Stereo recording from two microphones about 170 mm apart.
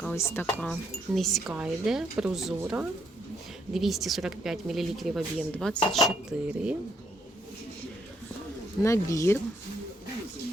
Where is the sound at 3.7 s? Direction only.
Centre (ahead or behind).